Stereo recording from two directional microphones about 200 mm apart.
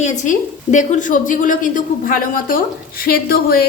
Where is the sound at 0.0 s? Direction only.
40° left (ahead or behind).